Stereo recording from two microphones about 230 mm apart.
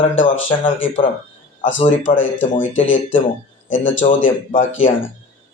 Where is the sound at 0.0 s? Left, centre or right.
Left.